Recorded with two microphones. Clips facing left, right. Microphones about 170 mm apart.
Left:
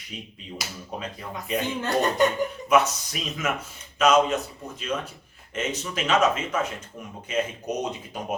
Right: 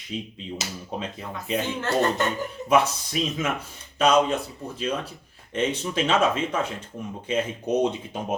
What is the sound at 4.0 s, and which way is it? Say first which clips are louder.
Speech: even; 35° right (ahead or behind).